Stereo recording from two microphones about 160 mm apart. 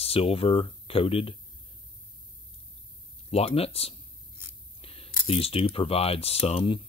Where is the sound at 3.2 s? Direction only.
40° left (ahead or behind).